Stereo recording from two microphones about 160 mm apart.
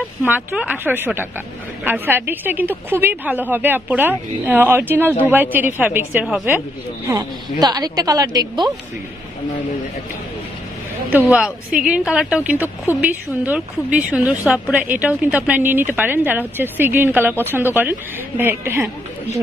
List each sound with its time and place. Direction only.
0.2 s a woman's voice: 10° right (ahead or behind)
7.1 s a woman's voice: 25° right (ahead or behind)
11.1 s a woman's voice: 10° right (ahead or behind)